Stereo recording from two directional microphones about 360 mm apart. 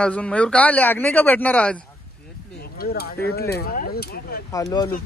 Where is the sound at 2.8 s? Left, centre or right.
Left.